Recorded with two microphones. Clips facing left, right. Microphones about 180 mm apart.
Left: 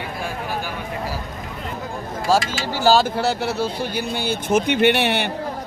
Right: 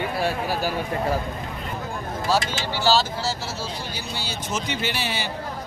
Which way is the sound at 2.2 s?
45° left (ahead or behind).